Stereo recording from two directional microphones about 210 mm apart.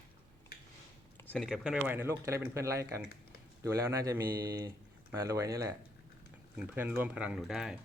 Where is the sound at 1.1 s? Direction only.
10° left (ahead or behind).